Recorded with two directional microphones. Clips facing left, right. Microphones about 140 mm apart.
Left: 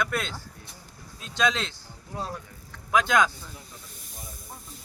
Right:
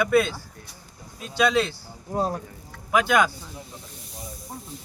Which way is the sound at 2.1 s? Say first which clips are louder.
Right 9 dB; 40° right (ahead or behind).